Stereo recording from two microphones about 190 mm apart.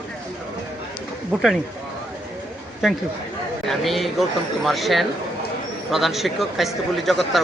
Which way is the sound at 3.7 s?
Centre (ahead or behind).